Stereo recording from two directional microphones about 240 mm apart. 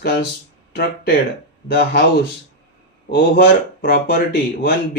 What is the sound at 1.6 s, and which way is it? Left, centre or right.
Speech, left.